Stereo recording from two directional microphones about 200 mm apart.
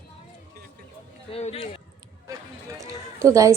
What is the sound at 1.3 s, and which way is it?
Speech, 30° left (ahead or behind).